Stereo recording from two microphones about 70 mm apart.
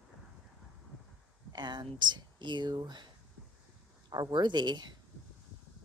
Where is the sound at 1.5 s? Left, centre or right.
Right.